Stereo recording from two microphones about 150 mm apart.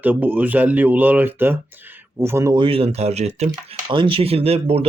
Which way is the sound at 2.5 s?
35° right (ahead or behind).